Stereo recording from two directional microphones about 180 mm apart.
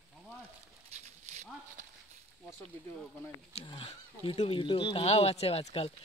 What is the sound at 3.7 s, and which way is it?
Speech, 30° left (ahead or behind).